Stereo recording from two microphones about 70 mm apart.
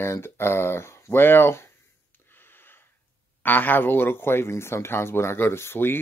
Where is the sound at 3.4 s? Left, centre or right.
Left.